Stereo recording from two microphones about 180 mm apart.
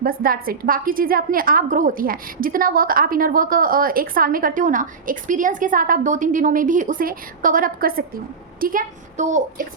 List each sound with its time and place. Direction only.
0.0 s a woman's voice: 55° right (ahead or behind)